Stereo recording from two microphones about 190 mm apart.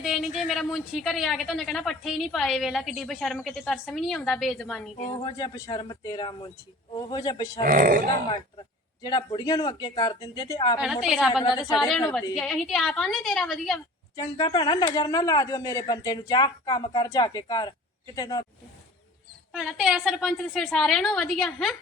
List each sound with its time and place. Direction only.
0.0 s speech: centre (ahead or behind)
5.2 s a woman's voice: 20° left (ahead or behind)
7.6 s speech: 45° right (ahead or behind)
9.0 s a woman's voice: 25° left (ahead or behind)
11.0 s speech: centre (ahead or behind)
14.2 s a woman's voice: 20° left (ahead or behind)
19.5 s speech: 5° right (ahead or behind)